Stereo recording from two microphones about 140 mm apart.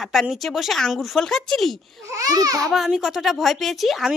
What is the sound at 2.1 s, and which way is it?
Speech, 25° right (ahead or behind).